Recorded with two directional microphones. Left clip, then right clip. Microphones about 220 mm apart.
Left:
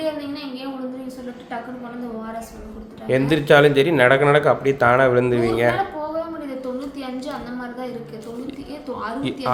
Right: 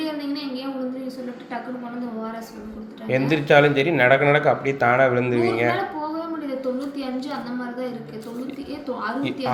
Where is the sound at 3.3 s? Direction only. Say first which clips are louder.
Left 2 dB; 25° left (ahead or behind).